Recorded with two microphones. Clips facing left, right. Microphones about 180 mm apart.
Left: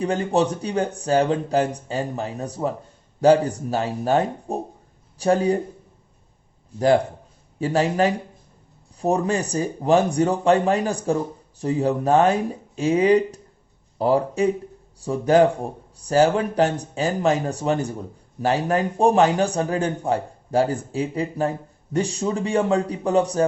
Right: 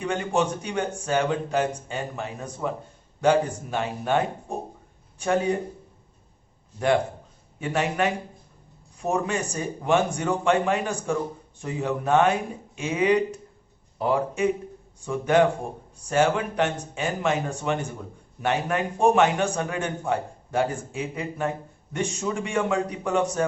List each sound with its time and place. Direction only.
0.0 s a man's voice: 35° left (ahead or behind)
6.7 s a man's voice: 35° left (ahead or behind)